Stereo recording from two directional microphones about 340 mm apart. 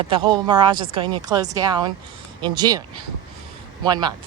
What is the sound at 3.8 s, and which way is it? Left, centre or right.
Speech, centre.